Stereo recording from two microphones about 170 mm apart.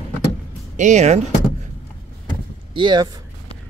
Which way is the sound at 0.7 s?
45° right (ahead or behind).